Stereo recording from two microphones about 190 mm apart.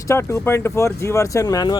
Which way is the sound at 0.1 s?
10° left (ahead or behind).